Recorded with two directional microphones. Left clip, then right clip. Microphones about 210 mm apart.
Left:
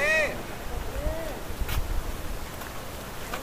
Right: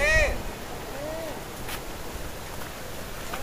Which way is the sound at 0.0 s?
30° right (ahead or behind).